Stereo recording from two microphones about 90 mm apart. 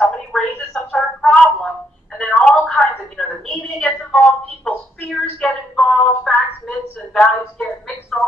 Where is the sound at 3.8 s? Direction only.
5° left (ahead or behind).